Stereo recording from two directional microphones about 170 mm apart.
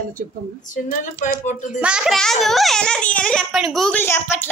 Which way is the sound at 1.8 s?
5° right (ahead or behind).